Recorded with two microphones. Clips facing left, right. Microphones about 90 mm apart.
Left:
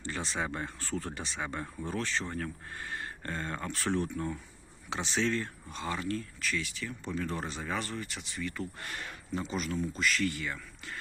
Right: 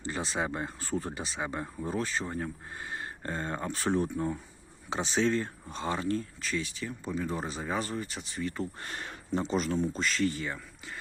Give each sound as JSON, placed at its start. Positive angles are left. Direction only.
{"t": 0.1, "sound": "speech", "side_deg": -20}